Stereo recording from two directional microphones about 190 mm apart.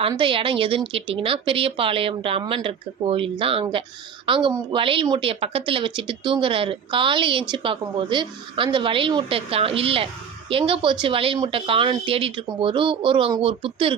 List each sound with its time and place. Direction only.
0.1 s speech: 25° right (ahead or behind)